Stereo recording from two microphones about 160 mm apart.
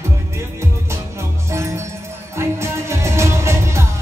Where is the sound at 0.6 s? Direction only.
15° right (ahead or behind).